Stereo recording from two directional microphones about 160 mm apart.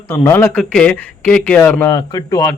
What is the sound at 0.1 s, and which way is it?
Speech, 15° left (ahead or behind).